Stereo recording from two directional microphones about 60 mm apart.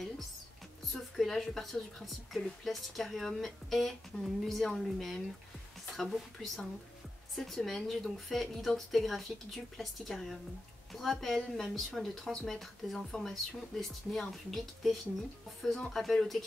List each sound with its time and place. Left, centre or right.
0.9 s a woman's voice: centre
4.1 s a woman's voice: centre
4.5 s a woman's voice: centre